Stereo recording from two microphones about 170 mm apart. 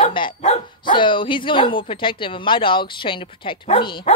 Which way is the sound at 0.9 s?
30° left (ahead or behind).